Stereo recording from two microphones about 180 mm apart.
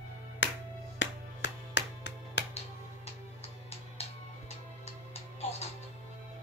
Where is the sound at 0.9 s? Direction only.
75° left (ahead or behind).